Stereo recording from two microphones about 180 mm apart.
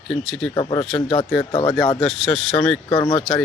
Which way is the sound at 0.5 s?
25° left (ahead or behind).